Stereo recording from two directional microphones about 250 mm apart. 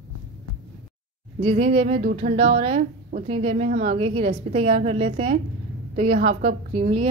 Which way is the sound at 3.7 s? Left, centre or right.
Right.